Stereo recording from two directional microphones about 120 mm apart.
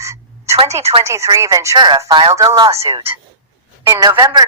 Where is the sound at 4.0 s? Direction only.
30° right (ahead or behind).